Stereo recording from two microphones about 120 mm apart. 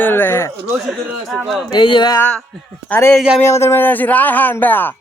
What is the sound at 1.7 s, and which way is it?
Speech, 40° left (ahead or behind).